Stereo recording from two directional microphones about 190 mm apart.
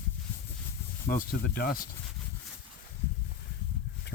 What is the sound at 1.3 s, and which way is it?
Sanding, 50° left (ahead or behind).